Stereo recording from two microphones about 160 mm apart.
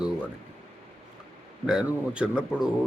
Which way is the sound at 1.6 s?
5° right (ahead or behind).